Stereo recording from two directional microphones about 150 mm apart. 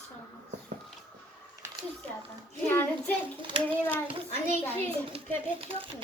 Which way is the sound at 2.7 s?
15° left (ahead or behind).